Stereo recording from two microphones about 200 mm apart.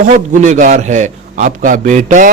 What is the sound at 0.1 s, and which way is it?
A man's voice, 35° right (ahead or behind).